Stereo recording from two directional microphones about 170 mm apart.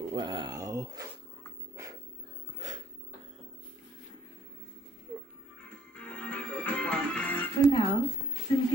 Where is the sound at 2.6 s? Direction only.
45° right (ahead or behind).